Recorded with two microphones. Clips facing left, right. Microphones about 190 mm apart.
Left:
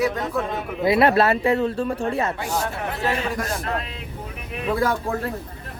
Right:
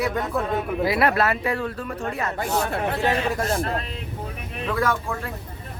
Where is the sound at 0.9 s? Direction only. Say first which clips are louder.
Left 6 dB; 25° left (ahead or behind).